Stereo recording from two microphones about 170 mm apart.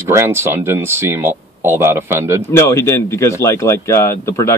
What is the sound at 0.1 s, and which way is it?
Speech, 15° right (ahead or behind).